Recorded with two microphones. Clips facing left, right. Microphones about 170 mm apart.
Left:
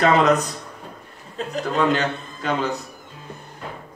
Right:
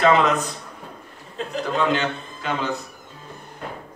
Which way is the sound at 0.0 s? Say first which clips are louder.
Left 1 dB; 40° left (ahead or behind).